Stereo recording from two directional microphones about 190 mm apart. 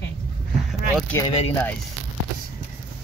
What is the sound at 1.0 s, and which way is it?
Speech, 10° left (ahead or behind).